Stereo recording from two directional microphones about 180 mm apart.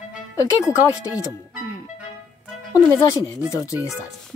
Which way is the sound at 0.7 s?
20° left (ahead or behind).